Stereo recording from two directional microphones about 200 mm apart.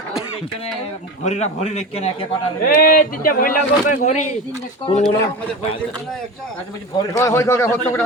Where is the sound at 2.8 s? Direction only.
45° left (ahead or behind).